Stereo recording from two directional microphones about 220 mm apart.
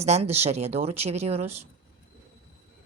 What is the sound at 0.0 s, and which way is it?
Speech, 30° right (ahead or behind).